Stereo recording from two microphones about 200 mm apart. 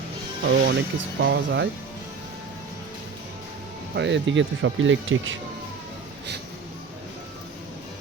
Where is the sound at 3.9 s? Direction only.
60° right (ahead or behind).